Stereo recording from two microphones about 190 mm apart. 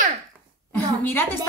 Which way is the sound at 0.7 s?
10° left (ahead or behind).